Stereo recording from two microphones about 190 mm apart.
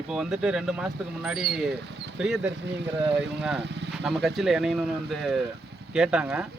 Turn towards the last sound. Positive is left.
turn(degrees=-5)  # may be behind; listen again after turning